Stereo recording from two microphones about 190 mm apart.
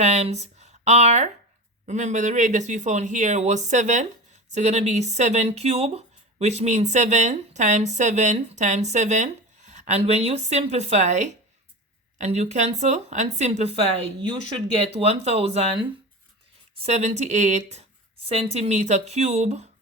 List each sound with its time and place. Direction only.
0.0 s speech: 35° right (ahead or behind)
16.8 s speech: 35° right (ahead or behind)